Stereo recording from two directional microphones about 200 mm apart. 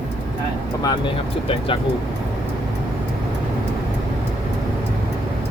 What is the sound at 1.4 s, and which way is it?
Speech, 25° left (ahead or behind).